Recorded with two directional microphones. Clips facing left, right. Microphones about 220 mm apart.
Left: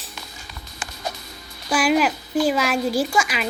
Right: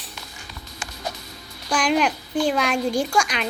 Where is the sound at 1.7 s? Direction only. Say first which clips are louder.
Left 2 dB; 5° left (ahead or behind).